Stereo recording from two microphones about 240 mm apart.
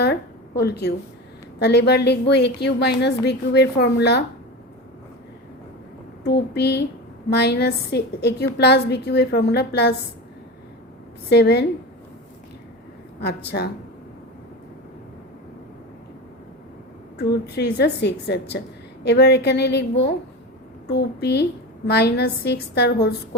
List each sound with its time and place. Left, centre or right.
0.0 s a sound: left
1.5 s a woman's voice: left
6.2 s a woman's voice: left
11.3 s a woman's voice: left
13.1 s a woman's voice: left
17.2 s a woman's voice: left